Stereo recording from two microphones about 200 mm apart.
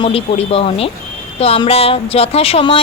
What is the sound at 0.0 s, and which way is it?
A woman's voice, 30° left (ahead or behind).